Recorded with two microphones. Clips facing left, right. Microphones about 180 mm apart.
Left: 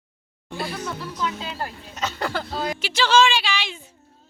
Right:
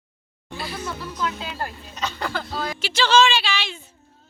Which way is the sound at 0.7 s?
Centre (ahead or behind).